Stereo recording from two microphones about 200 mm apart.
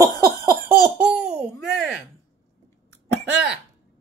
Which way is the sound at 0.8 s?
55° right (ahead or behind).